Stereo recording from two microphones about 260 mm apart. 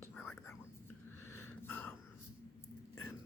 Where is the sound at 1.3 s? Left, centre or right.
Centre.